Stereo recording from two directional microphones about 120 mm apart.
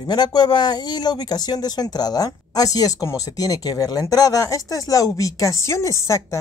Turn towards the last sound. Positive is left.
turn(degrees=25)  # may be behind; listen again after turning